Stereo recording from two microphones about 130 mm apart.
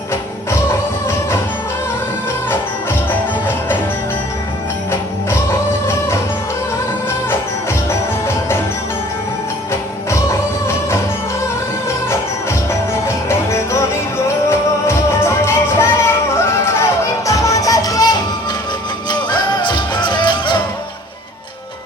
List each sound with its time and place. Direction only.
0.7 s music: 20° left (ahead or behind)
3.1 s music: 15° left (ahead or behind)
4.9 s jingle bell: 20° left (ahead or behind)
7.9 s music: 20° left (ahead or behind)
12.0 s music: 20° left (ahead or behind)
19.3 s music: 35° left (ahead or behind)